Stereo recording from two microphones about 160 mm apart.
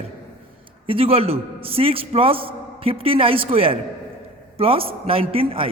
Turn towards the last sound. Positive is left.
turn(degrees=-35)  # may be behind; listen again after turning